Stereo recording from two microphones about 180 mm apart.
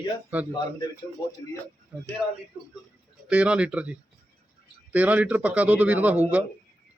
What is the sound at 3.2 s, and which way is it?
A man's voice, 5° right (ahead or behind).